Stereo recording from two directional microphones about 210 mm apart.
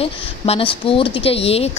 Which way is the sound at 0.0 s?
25° left (ahead or behind).